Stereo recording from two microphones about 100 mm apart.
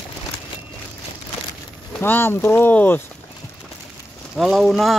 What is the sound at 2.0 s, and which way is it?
Speech, 20° left (ahead or behind).